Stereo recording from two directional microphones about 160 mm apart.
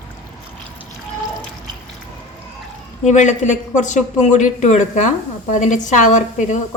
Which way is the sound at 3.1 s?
50° left (ahead or behind).